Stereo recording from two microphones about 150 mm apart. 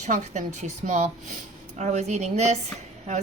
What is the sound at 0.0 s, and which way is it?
A woman's voice, 55° right (ahead or behind).